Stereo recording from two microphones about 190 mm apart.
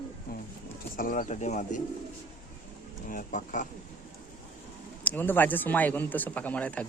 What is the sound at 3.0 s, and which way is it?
Speech, 45° left (ahead or behind).